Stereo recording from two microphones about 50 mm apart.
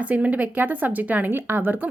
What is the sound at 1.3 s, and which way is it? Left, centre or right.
Speech, right.